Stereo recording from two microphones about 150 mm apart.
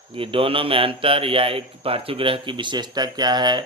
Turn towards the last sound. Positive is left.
turn(degrees=-30)  # may be behind; listen again after turning